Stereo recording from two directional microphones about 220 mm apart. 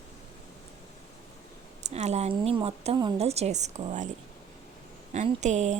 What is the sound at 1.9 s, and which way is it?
A woman's voice, 30° right (ahead or behind).